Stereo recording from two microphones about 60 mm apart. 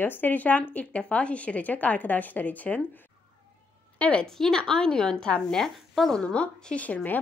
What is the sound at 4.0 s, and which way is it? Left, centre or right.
A woman's voice, centre.